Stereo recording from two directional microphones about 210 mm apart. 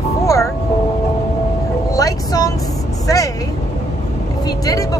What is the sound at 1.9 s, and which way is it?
Speech, 15° left (ahead or behind).